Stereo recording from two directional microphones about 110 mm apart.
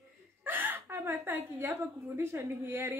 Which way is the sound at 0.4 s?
20° right (ahead or behind).